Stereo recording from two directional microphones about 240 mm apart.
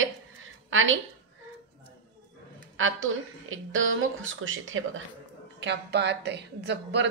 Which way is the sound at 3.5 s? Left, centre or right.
Right.